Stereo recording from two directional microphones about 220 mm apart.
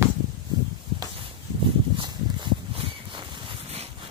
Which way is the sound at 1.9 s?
20° right (ahead or behind).